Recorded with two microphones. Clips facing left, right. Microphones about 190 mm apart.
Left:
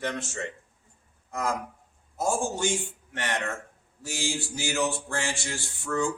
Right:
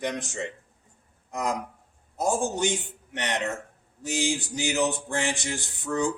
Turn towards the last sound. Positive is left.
turn(degrees=-20)  # may be behind; listen again after turning